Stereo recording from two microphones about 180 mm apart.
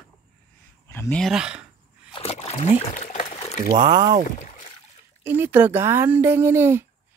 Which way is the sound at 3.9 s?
25° right (ahead or behind).